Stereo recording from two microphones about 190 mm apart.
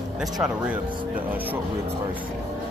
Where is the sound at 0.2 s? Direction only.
5° right (ahead or behind).